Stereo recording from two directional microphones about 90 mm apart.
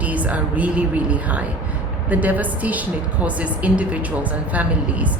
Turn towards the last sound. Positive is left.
turn(degrees=-15)  # may be behind; listen again after turning